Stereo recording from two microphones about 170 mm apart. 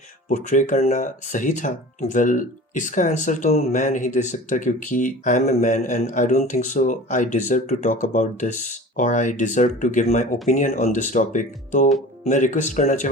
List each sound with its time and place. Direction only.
0.3 s speech: 45° left (ahead or behind)